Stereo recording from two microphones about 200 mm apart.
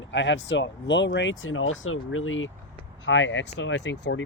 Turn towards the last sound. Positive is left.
turn(degrees=65)  # may be behind; listen again after turning